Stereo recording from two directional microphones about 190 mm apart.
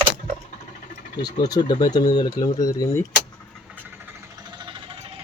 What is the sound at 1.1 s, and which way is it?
Speech, 20° left (ahead or behind).